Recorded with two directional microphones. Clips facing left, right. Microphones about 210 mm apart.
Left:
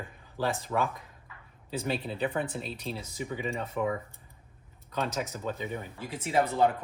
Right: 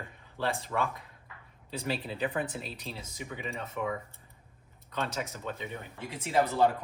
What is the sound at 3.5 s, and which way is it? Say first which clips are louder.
Speech: left 3 dB; 30° left (ahead or behind).